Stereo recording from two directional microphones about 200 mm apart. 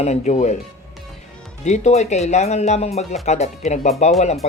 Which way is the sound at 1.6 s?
35° left (ahead or behind).